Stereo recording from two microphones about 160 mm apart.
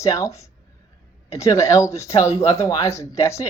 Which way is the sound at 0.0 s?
20° left (ahead or behind).